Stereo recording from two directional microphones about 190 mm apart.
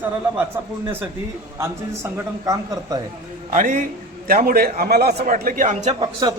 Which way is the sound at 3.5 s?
40° right (ahead or behind).